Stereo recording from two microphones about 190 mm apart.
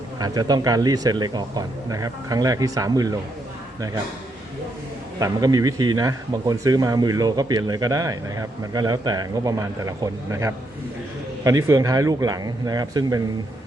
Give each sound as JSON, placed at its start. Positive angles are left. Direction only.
{"t": 0.2, "sound": "speech", "side_deg": -20}
{"t": 5.2, "sound": "speech", "side_deg": -20}